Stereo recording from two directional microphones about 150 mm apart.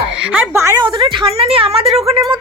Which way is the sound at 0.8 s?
30° right (ahead or behind).